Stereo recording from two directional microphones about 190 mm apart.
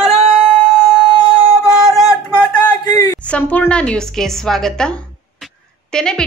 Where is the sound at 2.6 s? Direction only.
20° left (ahead or behind).